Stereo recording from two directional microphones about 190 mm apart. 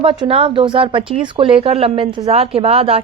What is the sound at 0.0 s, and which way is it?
Speech, 30° right (ahead or behind).